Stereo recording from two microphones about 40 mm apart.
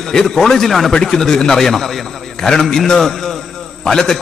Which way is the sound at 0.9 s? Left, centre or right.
Centre.